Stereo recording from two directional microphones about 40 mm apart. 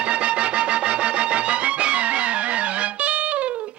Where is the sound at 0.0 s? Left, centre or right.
Right.